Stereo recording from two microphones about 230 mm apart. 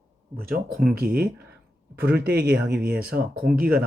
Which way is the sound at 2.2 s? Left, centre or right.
Right.